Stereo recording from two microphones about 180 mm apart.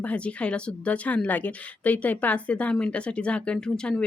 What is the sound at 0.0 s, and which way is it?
Speech, 5° left (ahead or behind).